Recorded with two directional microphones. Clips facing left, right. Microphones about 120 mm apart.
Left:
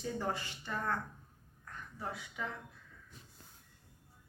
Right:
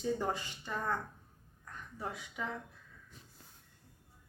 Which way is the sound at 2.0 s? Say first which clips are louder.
Right 1 dB; 20° right (ahead or behind).